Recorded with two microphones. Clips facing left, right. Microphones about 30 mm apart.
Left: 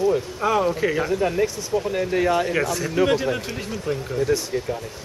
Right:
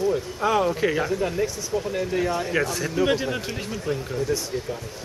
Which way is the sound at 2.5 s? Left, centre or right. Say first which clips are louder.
Left 2 dB; centre.